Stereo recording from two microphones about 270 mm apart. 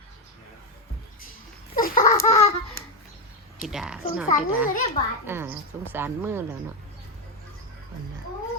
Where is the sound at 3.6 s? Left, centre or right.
Centre.